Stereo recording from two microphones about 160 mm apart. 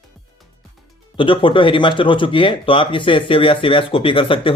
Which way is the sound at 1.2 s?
30° left (ahead or behind).